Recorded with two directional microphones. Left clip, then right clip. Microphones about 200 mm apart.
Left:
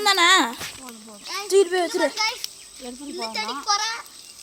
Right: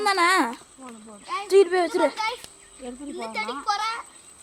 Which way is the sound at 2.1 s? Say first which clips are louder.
Left 3 dB; 40° right (ahead or behind).